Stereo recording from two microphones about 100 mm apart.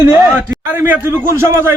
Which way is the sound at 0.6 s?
20° right (ahead or behind).